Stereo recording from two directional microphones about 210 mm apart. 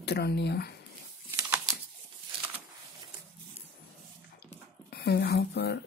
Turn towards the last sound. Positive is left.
turn(degrees=50)  # may be behind; listen again after turning